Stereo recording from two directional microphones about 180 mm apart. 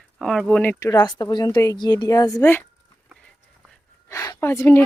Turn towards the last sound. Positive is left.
turn(degrees=15)  # may be behind; listen again after turning